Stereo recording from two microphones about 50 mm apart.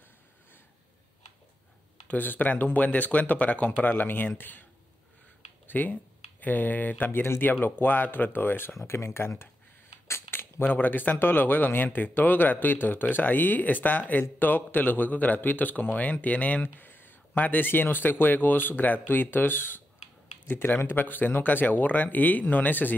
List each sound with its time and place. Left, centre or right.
2.0 s speech: left
5.7 s speech: left
7.1 s speech: left
8.7 s speech: left
10.3 s speech: left
16.8 s speech: left